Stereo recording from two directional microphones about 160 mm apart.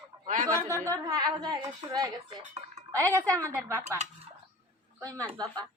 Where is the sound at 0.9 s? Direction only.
20° right (ahead or behind).